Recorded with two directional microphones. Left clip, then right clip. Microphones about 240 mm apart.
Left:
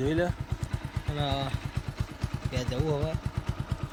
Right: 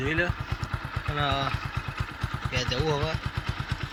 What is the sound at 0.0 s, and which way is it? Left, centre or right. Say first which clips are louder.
Speech: right 1 dB; left.